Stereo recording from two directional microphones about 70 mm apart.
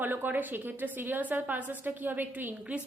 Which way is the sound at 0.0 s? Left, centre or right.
Right.